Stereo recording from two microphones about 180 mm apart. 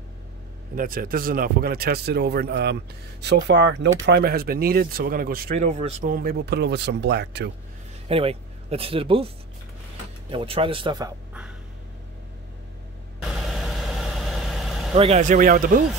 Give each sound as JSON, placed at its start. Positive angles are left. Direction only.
{"t": 0.7, "sound": "speech", "side_deg": -55}
{"t": 5.6, "sound": "speech", "side_deg": -35}
{"t": 8.1, "sound": "speech", "side_deg": -35}
{"t": 10.3, "sound": "speech", "side_deg": -30}
{"t": 13.2, "sound": "vehicle", "side_deg": 0}
{"t": 15.0, "sound": "speech", "side_deg": -40}